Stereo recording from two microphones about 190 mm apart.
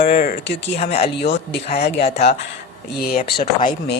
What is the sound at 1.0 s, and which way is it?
Speech, 60° left (ahead or behind).